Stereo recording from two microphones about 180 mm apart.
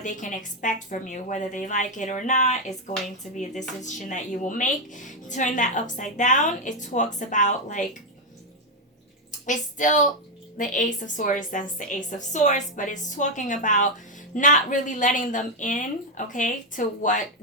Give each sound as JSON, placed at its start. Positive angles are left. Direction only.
{"t": 0.0, "sound": "speech", "side_deg": 45}
{"t": 9.5, "sound": "speech", "side_deg": 45}